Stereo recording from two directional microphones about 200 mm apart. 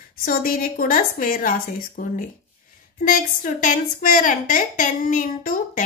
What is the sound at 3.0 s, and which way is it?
A woman's voice, 40° left (ahead or behind).